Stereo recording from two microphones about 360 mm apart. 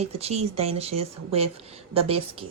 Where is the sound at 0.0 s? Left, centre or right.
Centre.